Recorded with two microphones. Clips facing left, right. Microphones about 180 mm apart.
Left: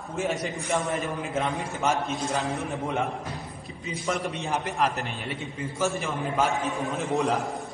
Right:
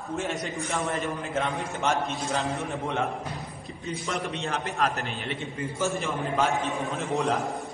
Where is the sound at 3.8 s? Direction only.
Centre (ahead or behind).